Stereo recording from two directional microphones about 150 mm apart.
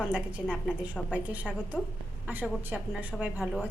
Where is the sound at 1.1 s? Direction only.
10° right (ahead or behind).